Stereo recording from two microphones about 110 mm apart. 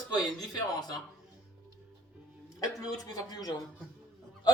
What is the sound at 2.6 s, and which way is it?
Speech, 30° left (ahead or behind).